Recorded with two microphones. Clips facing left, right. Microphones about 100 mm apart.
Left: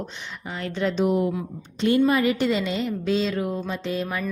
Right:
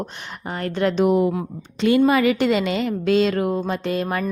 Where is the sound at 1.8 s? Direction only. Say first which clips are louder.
Right 3 dB; 90° right.